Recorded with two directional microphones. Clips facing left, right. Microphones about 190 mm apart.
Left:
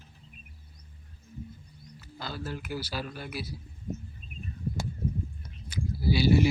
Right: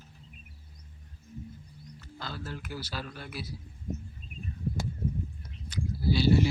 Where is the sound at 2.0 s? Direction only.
5° left (ahead or behind).